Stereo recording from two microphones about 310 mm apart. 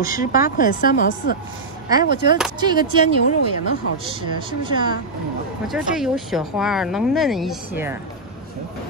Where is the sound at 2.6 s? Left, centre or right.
Centre.